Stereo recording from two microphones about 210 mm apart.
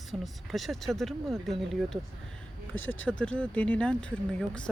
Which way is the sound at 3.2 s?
5° left (ahead or behind).